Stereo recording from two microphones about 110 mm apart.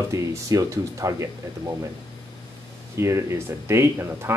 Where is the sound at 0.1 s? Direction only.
30° right (ahead or behind).